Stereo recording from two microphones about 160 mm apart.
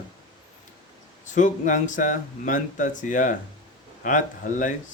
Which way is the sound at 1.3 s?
50° left (ahead or behind).